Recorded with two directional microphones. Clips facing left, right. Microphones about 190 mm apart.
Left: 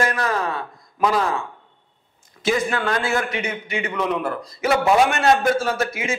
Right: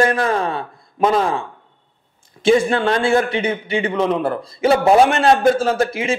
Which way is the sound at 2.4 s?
30° right (ahead or behind).